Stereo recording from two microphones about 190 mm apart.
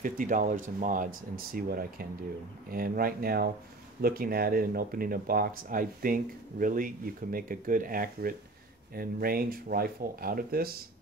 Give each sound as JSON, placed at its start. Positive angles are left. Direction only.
{"t": 0.0, "sound": "speech", "side_deg": -45}